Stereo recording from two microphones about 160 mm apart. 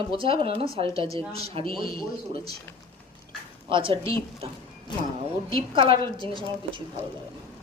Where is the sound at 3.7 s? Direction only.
35° right (ahead or behind).